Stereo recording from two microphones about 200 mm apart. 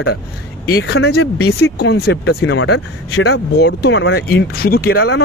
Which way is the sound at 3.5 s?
55° left (ahead or behind).